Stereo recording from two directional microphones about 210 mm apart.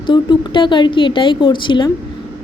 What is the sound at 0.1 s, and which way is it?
A woman's voice, 20° left (ahead or behind).